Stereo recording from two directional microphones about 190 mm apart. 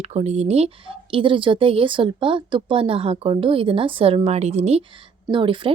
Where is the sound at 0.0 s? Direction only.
35° right (ahead or behind).